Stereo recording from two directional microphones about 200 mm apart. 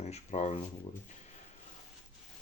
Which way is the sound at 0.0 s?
35° left (ahead or behind).